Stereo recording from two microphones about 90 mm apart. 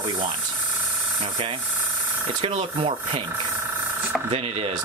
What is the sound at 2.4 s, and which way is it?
Speech, 75° right (ahead or behind).